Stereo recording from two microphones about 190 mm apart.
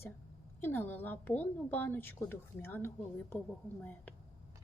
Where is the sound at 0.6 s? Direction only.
10° left (ahead or behind).